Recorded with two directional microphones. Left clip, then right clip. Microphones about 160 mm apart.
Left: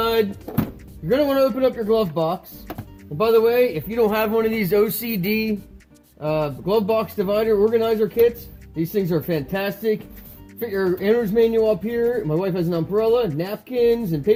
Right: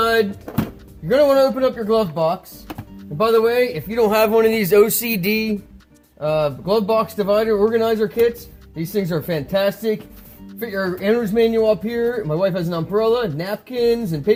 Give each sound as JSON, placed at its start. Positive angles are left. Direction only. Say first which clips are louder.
{"t": 0.0, "sound": "music", "louder": "right 3 dB", "side_deg": -25}
{"t": 1.0, "sound": "a man's voice", "louder": "right 4 dB", "side_deg": -20}
{"t": 4.1, "sound": "speech", "louder": "right 5 dB", "side_deg": -30}
{"t": 11.0, "sound": "speech", "louder": "right 2 dB", "side_deg": -10}